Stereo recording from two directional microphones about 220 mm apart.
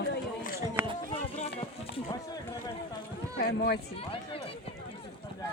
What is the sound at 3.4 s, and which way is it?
Speech, 45° left (ahead or behind).